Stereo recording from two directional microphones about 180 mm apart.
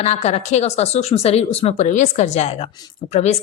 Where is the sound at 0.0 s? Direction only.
40° left (ahead or behind).